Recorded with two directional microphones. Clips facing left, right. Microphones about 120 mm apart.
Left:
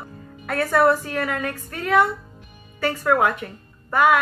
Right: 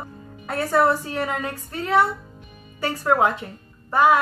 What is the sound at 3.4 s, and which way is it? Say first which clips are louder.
Speech: left 2 dB; 25° right (ahead or behind).